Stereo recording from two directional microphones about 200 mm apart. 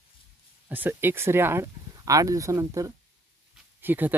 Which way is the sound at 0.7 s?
10° right (ahead or behind).